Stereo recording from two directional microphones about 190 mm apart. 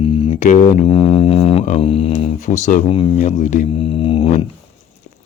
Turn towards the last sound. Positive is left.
turn(degrees=30)  # may be behind; listen again after turning